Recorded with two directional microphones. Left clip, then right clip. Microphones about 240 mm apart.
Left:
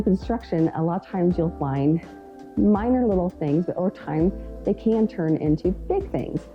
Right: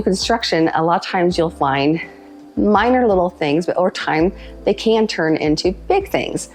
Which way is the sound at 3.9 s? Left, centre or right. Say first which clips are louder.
Right 8 dB; centre.